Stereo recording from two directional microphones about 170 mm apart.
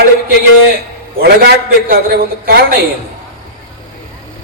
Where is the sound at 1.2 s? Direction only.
65° right (ahead or behind).